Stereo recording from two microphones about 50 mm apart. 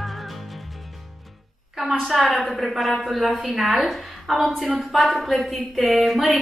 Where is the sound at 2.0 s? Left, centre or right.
Centre.